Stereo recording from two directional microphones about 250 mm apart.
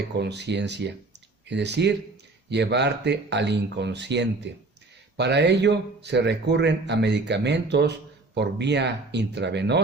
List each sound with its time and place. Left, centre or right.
0.1 s speech: right